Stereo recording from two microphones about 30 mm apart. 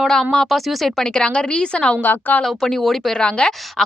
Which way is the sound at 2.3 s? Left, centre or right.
Left.